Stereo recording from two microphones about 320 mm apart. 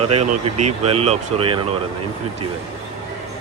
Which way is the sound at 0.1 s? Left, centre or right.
Right.